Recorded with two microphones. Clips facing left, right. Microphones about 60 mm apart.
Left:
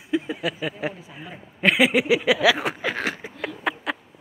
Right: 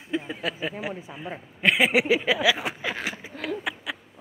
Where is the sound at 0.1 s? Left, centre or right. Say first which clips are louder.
Left 4 dB; centre.